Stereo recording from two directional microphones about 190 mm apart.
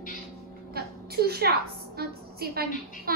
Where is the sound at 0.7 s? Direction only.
55° right (ahead or behind).